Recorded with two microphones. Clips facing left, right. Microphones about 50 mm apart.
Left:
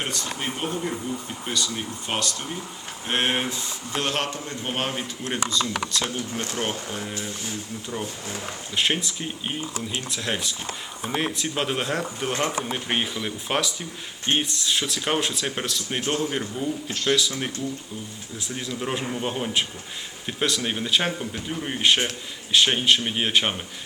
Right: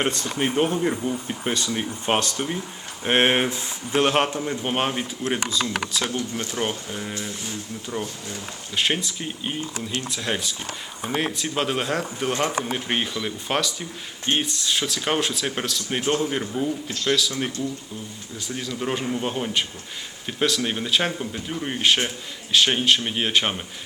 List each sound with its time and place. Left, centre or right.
0.0 s a man's voice: right; by 17.3 s centre
18.3 s speech: centre